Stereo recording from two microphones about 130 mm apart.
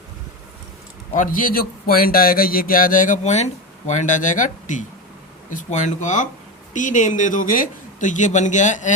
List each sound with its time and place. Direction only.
1.1 s a man's voice: 85° left; by 8.9 s 70° left (ahead or behind)